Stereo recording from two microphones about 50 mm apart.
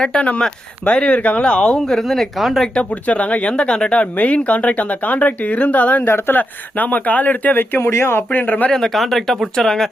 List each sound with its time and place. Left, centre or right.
0.0 s speech: centre
1.8 s speech: centre
2.9 s speech: left
6.1 s speech: left
6.7 s speech: left
7.9 s speech: left
8.3 s speech: left
8.7 s speech: centre